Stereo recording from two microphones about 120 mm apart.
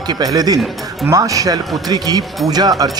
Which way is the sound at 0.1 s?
35° right (ahead or behind).